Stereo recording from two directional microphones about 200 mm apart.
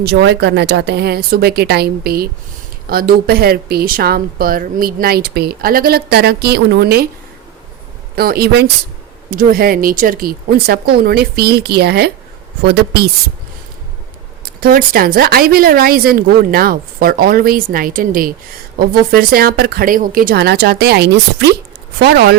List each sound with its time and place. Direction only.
0.0 s speech: 55° right (ahead or behind)
8.1 s speech: 50° right (ahead or behind)
14.4 s speech: 50° right (ahead or behind)